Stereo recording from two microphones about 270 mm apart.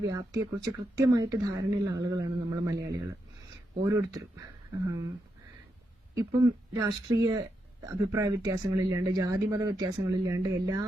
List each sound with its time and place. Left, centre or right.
0.1 s speech: centre
6.1 s speech: centre